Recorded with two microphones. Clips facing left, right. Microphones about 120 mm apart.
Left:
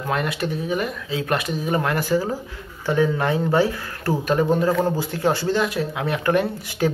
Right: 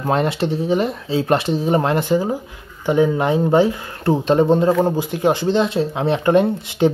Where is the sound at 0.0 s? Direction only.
30° right (ahead or behind).